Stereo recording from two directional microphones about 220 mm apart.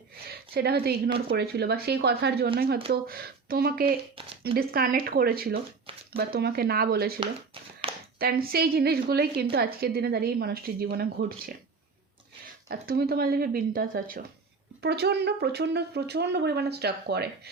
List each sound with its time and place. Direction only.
0.3 s a woman's voice: 45° right (ahead or behind)
4.1 s speech: 25° right (ahead or behind)
4.5 s a woman's voice: 40° right (ahead or behind)
7.8 s a sound: 25° right (ahead or behind)
8.2 s a woman's voice: 45° right (ahead or behind)
12.6 s a woman's voice: 45° right (ahead or behind)